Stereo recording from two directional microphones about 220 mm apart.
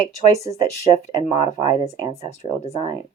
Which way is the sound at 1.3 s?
30° left (ahead or behind).